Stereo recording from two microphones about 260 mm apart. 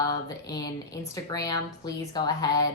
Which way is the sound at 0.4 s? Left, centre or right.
Centre.